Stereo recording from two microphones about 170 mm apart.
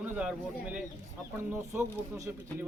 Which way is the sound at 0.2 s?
5° right (ahead or behind).